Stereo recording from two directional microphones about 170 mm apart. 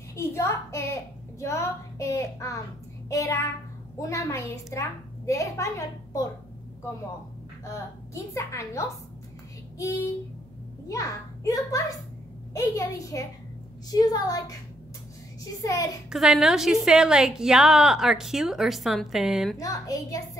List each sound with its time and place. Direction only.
0.1 s a woman's voice: 15° left (ahead or behind)
7.6 s a woman's voice: 20° left (ahead or behind)
10.9 s a child's voice: 20° left (ahead or behind)
15.6 s a child's voice: 20° left (ahead or behind)
16.1 s a woman's voice: 5° right (ahead or behind)
19.6 s a child's voice: 20° left (ahead or behind)